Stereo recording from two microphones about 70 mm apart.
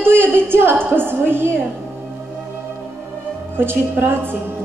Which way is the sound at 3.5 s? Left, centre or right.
Right.